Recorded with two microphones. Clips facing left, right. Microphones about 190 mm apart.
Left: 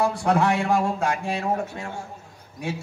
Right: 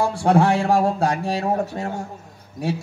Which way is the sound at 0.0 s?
30° right (ahead or behind).